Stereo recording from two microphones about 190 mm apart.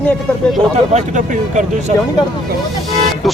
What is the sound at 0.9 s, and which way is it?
Speech, 40° right (ahead or behind).